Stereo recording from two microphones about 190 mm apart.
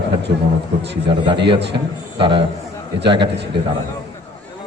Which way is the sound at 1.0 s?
25° right (ahead or behind).